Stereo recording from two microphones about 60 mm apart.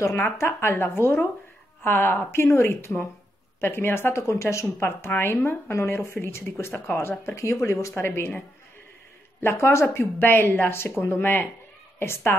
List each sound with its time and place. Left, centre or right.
0.4 s speech: left
5.1 s speech: left
5.7 s speech: left
7.9 s speech: left
9.4 s speech: left
9.9 s speech: left